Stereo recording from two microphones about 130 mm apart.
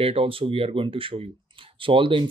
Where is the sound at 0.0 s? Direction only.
45° right (ahead or behind).